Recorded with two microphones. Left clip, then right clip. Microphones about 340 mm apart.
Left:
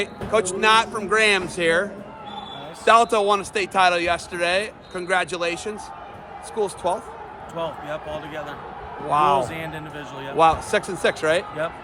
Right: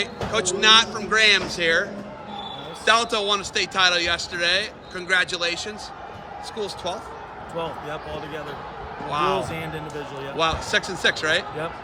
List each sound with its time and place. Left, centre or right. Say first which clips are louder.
0.0 s speech: left 2 dB; centre
9.0 s speech: left 5 dB; centre